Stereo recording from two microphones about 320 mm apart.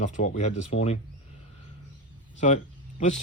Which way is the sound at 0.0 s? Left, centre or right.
Left.